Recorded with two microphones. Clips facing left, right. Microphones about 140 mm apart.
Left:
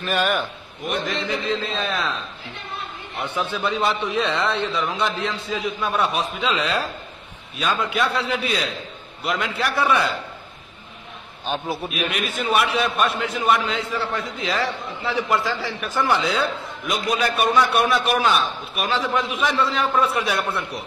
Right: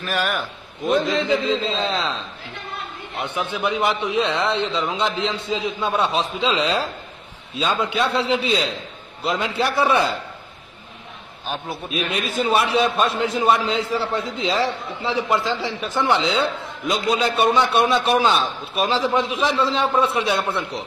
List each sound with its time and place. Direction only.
0.0 s a man's voice: centre (ahead or behind)
1.5 s a man's voice: 25° right (ahead or behind)
3.2 s a man's voice: 20° right (ahead or behind)
11.4 s a man's voice: centre (ahead or behind)
11.9 s a man's voice: 30° right (ahead or behind)